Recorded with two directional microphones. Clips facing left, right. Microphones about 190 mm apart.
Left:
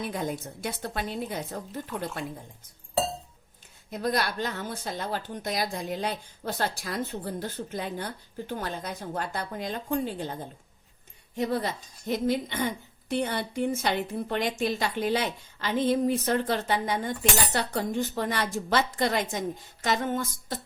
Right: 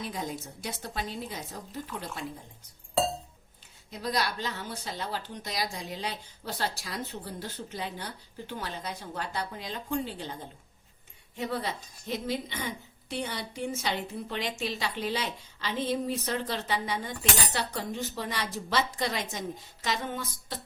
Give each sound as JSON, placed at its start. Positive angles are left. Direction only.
{"t": 0.0, "sound": "a woman's voice", "side_deg": 55}
{"t": 3.8, "sound": "a woman's voice", "side_deg": 50}
{"t": 11.3, "sound": "a woman's voice", "side_deg": 45}